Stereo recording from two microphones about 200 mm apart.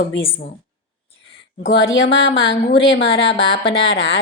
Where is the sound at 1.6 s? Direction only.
70° left (ahead or behind).